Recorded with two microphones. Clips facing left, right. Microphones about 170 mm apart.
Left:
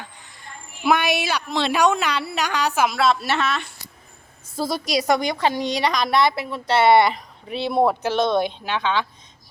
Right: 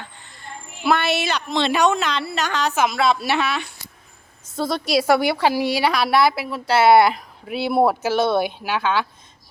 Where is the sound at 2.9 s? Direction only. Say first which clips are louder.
Right 1 dB; centre (ahead or behind).